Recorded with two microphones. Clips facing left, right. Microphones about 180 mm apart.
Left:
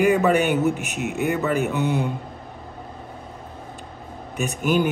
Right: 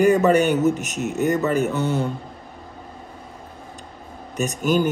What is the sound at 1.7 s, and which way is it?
Speech, 15° left (ahead or behind).